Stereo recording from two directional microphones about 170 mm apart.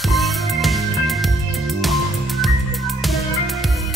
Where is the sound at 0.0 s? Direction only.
Centre (ahead or behind).